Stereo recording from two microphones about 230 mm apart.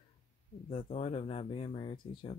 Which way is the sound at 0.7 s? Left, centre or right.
Left.